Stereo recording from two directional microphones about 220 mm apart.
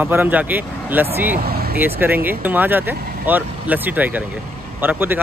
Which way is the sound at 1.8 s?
10° right (ahead or behind).